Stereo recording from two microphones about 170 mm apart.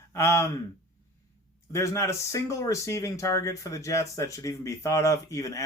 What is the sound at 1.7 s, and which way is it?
Speech, 15° left (ahead or behind).